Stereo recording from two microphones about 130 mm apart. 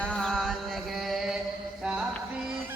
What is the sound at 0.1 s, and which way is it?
Music, 5° left (ahead or behind).